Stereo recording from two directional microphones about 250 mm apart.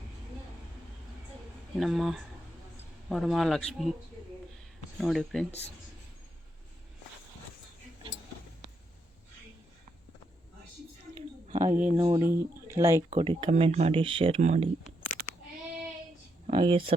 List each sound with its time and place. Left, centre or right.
1.8 s speech: centre
4.9 s speech: centre
11.5 s speech: centre
14.8 s a sound: centre
16.5 s speech: centre